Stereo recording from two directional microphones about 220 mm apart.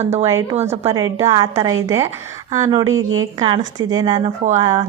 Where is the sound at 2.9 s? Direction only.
65° right (ahead or behind).